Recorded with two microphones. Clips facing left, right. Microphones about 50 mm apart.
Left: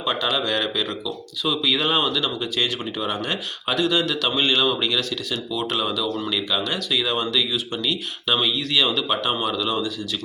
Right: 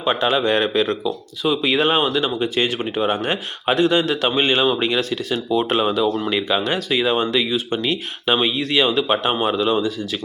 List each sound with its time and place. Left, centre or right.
0.0 s speech: right